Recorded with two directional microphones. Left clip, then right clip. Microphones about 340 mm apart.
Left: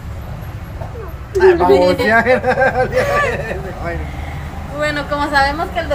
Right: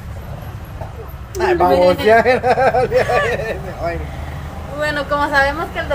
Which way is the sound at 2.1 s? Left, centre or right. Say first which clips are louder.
Right 1 dB; right.